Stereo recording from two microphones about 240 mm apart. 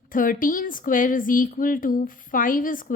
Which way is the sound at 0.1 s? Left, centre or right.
Left.